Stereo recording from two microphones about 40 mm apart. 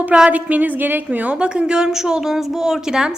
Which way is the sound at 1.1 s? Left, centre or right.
Right.